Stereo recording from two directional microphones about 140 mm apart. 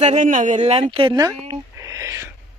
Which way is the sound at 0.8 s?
35° right (ahead or behind).